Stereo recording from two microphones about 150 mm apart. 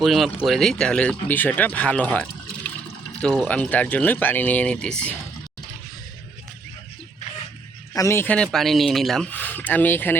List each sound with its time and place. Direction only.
0.0 s speech: centre (ahead or behind)
7.9 s speech: 20° left (ahead or behind)
8.5 s speech: centre (ahead or behind)